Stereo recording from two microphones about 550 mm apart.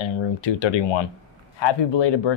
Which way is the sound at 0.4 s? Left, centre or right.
Left.